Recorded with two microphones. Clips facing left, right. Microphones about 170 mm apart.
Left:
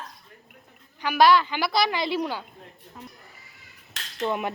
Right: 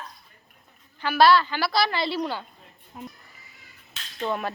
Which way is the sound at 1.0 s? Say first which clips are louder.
Even; 15° left (ahead or behind).